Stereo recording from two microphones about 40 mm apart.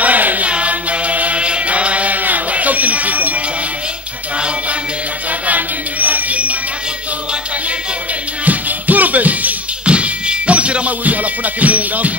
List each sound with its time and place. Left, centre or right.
0.0 s chant: right
0.5 s chant: right
2.2 s music: right
5.5 s a sound: right
8.5 s music: right
9.8 s music: right